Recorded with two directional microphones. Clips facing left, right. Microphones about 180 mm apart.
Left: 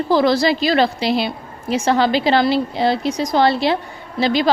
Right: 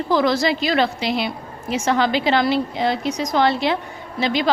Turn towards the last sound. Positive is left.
turn(degrees=35)  # may be behind; listen again after turning